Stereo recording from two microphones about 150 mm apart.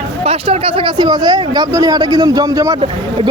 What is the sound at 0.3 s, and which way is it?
Speech, 40° right (ahead or behind).